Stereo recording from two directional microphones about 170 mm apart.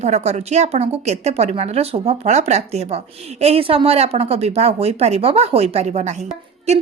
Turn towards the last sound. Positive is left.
turn(degrees=-40)  # may be behind; listen again after turning